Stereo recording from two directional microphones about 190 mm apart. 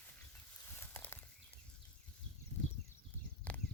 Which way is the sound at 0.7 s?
10° left (ahead or behind).